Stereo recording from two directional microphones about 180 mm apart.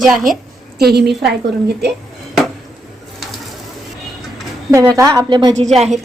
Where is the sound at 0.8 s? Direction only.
65° right (ahead or behind).